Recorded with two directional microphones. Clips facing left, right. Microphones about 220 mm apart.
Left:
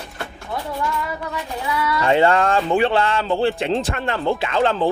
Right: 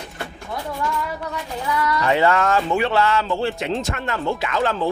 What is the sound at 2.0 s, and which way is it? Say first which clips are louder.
Speech: left 3 dB; 30° left (ahead or behind).